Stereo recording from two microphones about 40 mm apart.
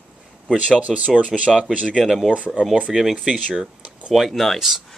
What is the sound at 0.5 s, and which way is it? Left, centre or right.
Speech, right.